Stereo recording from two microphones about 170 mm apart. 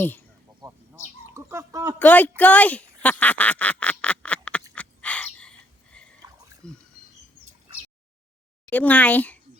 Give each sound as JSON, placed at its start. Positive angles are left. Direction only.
{"t": 0.6, "sound": "bird", "side_deg": -25}
{"t": 2.0, "sound": "speech", "side_deg": 10}
{"t": 4.7, "sound": "a sound", "side_deg": 10}
{"t": 8.7, "sound": "speech", "side_deg": 10}